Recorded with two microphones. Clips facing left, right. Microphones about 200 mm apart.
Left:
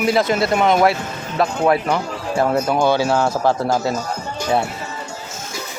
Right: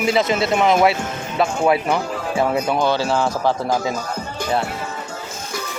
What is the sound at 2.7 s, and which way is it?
Speech, 10° left (ahead or behind).